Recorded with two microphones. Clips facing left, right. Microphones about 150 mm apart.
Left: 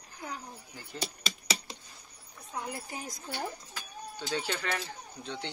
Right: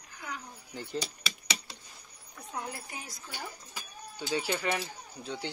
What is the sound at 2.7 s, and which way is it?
Speech, 35° left (ahead or behind).